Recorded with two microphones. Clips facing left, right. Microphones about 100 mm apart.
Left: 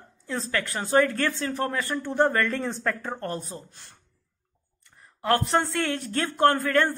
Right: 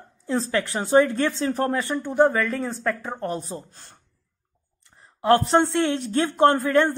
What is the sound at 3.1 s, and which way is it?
Speech, 15° right (ahead or behind).